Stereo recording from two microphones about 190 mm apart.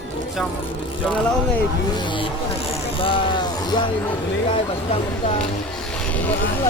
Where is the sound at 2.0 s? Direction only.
25° left (ahead or behind).